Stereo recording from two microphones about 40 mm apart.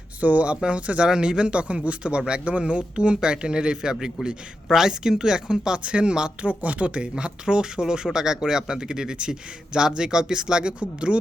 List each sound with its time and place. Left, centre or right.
0.2 s speech: right
6.4 s speech: right